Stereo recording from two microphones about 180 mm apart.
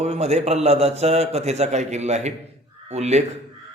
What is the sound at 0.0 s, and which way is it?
A man's voice, 35° right (ahead or behind).